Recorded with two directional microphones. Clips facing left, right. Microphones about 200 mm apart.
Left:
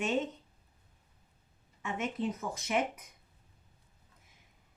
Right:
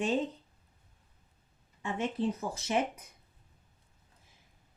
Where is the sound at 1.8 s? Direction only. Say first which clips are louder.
Right 2 dB; 30° right (ahead or behind).